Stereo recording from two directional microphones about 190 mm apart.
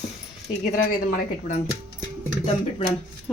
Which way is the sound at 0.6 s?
45° left (ahead or behind).